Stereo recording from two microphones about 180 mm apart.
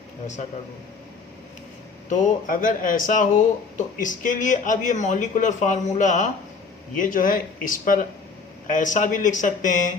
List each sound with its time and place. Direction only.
2.0 s speech: 45° left (ahead or behind)